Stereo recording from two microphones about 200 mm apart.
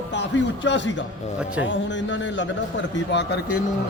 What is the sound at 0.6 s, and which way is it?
A man's voice, 65° left (ahead or behind).